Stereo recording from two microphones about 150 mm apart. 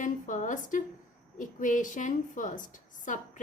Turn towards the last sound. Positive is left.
turn(degrees=60)  # may be behind; listen again after turning